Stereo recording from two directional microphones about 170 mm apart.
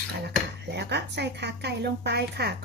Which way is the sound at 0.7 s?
85° right.